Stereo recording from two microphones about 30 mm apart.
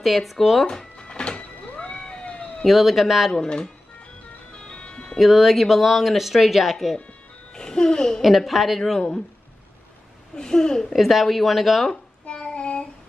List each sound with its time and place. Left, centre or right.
0.0 s speech: centre
0.9 s a sound: left
2.0 s cat: left
2.2 s cat: left
2.6 s speech: centre
3.3 s a child's voice: left
4.6 s music: left
5.2 s speech: centre
7.5 s a child's voice: left
8.2 s speech: centre
10.3 s a child's voice: left
11.0 s speech: centre
11.9 s child singing: left